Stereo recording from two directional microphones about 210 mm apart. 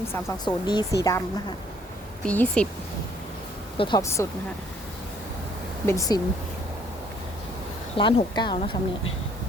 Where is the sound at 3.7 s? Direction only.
25° left (ahead or behind).